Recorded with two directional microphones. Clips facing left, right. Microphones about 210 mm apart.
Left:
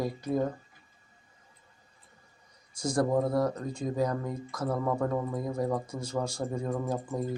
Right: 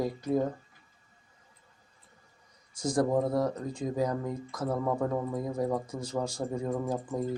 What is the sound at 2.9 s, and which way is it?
Speech, 10° right (ahead or behind).